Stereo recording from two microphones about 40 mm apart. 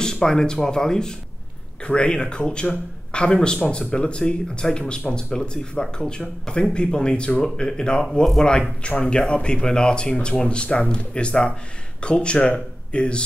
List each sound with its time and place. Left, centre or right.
0.0 s speech: centre
8.4 s speech: left